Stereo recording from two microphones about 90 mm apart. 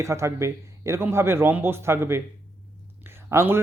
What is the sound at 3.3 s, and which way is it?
Speech, 25° right (ahead or behind).